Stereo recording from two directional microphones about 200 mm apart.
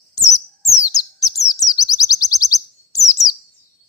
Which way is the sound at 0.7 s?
20° left (ahead or behind).